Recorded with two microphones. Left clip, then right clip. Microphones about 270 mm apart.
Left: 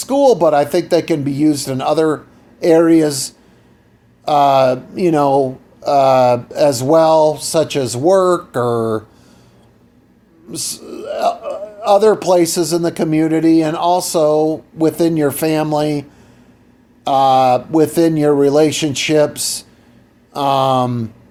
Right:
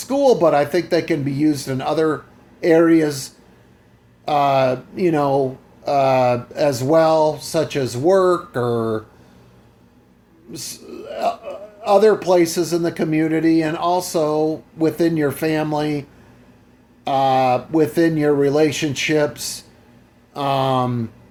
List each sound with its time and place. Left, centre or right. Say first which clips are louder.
0.0 s a man's voice: left 3 dB; left
10.5 s a man's voice: left 7 dB; left